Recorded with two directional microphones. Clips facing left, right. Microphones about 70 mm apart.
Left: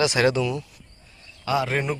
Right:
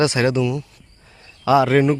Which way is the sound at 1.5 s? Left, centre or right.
Right.